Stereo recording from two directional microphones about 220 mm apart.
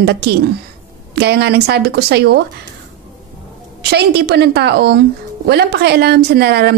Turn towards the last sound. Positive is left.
turn(degrees=-45)  # may be behind; listen again after turning